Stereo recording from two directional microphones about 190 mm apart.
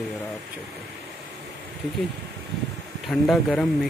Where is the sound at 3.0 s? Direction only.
Centre (ahead or behind).